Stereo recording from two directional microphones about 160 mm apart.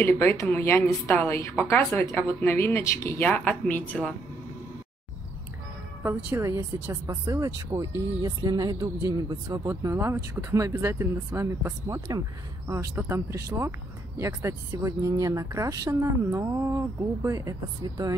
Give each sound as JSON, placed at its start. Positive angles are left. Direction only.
{"t": 0.0, "sound": "a woman's voice", "side_deg": 15}
{"t": 6.0, "sound": "speech", "side_deg": -15}